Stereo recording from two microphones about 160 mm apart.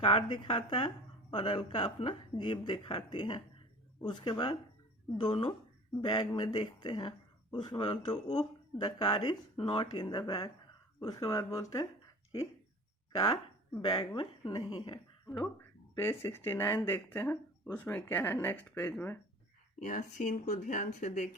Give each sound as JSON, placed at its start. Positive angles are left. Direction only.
{"t": 0.0, "sound": "speech", "side_deg": 35}
{"t": 13.7, "sound": "speech", "side_deg": 25}
{"t": 16.0, "sound": "speech", "side_deg": 15}
{"t": 19.8, "sound": "speech", "side_deg": 50}